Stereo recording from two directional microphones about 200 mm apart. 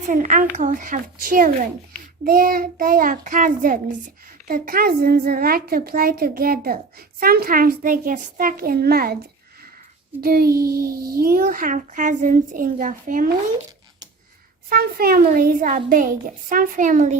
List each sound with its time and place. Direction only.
0.0 s a child's voice: 40° right (ahead or behind)
10.2 s a child's voice: 50° right (ahead or behind)
14.7 s a child's voice: 50° right (ahead or behind)